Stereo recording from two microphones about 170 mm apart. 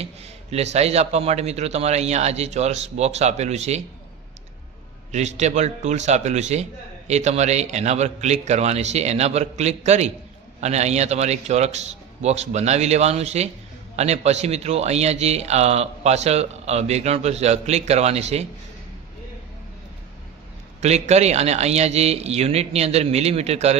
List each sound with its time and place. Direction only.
0.0 s speech: 40° right (ahead or behind)
5.1 s speech: 40° right (ahead or behind)
20.8 s speech: 40° right (ahead or behind)